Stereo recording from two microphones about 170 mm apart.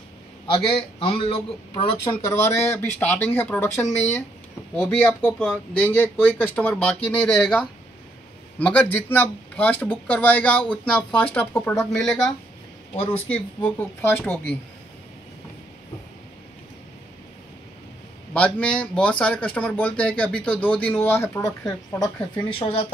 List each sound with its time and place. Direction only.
0.5 s a man's voice: 30° left (ahead or behind)
2.4 s speech: 15° left (ahead or behind)
12.9 s a man's voice: 35° left (ahead or behind)
13.7 s speech: 10° left (ahead or behind)
18.3 s speech: 5° left (ahead or behind); by 22.8 s 35° left (ahead or behind)